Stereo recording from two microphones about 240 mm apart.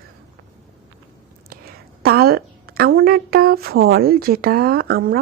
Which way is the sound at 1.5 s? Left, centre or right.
Right.